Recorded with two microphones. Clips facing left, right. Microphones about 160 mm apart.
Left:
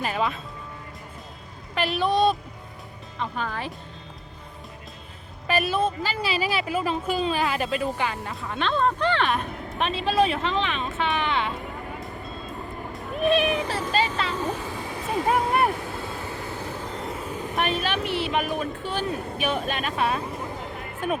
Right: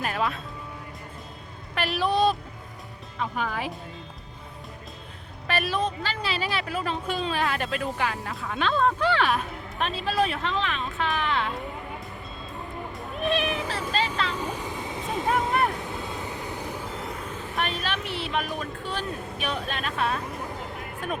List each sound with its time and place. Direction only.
0.0 s speech: centre (ahead or behind)
1.7 s speech: centre (ahead or behind)
5.5 s speech: 5° left (ahead or behind)
12.9 s cat: centre (ahead or behind)
13.9 s speech: centre (ahead or behind)
14.5 s a sound: 20° right (ahead or behind)
15.0 s vehicle: centre (ahead or behind)
15.8 s vehicle: 20° right (ahead or behind)
16.9 s vehicle: centre (ahead or behind)
17.6 s speech: centre (ahead or behind)